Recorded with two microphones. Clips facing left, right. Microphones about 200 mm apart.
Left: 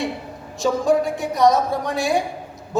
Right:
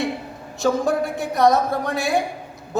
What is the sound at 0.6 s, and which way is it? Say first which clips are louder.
A man's voice: left 2 dB; 60° right (ahead or behind).